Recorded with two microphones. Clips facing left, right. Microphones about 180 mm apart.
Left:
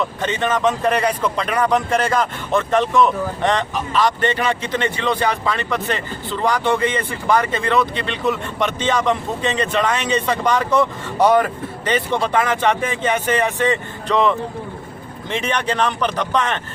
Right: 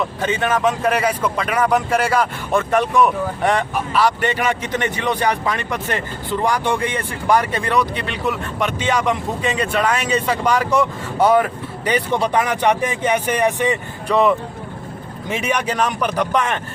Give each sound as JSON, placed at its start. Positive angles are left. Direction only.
{"t": 0.2, "sound": "speech", "side_deg": -10}